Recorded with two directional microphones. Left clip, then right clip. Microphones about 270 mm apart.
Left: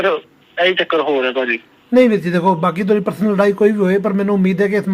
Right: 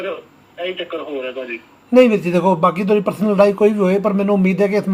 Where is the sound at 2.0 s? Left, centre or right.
Centre.